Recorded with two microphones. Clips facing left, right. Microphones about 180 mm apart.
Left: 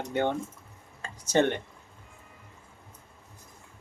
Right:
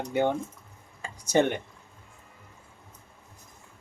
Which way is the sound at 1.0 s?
10° right (ahead or behind).